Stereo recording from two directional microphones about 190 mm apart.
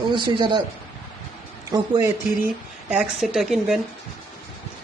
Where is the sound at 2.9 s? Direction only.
5° right (ahead or behind).